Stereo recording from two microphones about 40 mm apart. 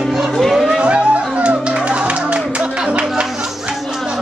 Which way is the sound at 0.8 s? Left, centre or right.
Right.